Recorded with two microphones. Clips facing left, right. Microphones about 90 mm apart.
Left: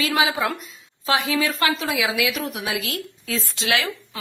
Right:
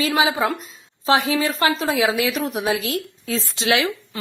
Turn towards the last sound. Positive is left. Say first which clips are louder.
# right 3 dB
turn(degrees=-25)  # may be behind; listen again after turning